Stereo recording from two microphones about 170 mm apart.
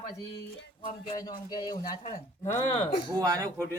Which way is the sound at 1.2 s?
20° left (ahead or behind).